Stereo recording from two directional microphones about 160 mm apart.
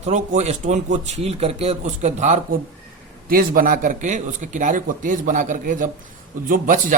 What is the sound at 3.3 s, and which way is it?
A man's voice, 60° right (ahead or behind).